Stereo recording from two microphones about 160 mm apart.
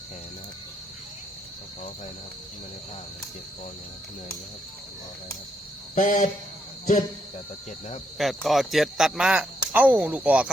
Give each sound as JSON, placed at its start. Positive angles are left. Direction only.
{"t": 5.9, "sound": "speech", "side_deg": 55}
{"t": 8.2, "sound": "speech", "side_deg": 0}